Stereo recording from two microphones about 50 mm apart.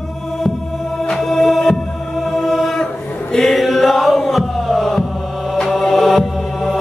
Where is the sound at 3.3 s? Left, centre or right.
Centre.